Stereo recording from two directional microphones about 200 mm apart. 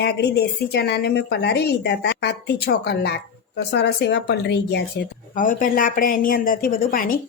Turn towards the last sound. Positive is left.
turn(degrees=45)  # may be behind; listen again after turning